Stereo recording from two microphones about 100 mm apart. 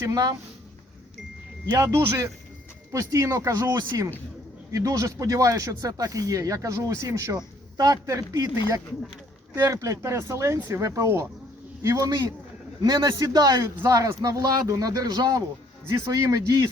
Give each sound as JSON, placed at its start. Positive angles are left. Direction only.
{"t": 0.0, "sound": "speech", "side_deg": -35}
{"t": 1.7, "sound": "speech", "side_deg": -25}